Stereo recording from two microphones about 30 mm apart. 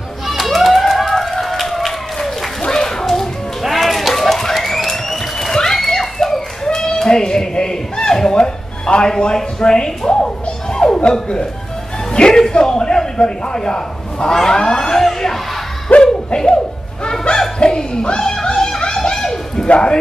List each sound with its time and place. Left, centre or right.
0.3 s run: centre
2.6 s children playing: centre
3.6 s music: centre
5.5 s a sound: centre
11.1 s fowl: left
12.1 s a man's voice: left
14.3 s fowl: centre
15.0 s a sound: centre
15.9 s a sound: left
17.6 s speech: left
18.2 s music: left
19.1 s a sound: centre
19.7 s speech: left